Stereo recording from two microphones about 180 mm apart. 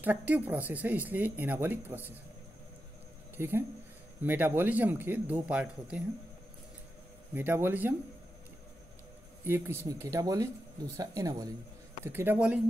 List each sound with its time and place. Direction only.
0.0 s speech: 10° right (ahead or behind)
3.3 s speech: 10° right (ahead or behind)
7.3 s speech: 10° right (ahead or behind)
9.4 s speech: 15° right (ahead or behind)